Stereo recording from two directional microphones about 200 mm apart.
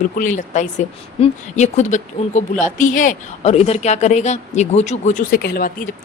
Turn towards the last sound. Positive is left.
turn(degrees=50)  # may be behind; listen again after turning